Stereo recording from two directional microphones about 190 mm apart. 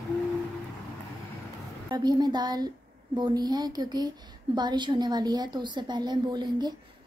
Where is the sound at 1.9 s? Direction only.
20° right (ahead or behind).